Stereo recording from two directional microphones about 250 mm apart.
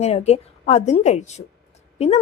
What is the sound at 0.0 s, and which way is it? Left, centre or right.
A woman's voice, left.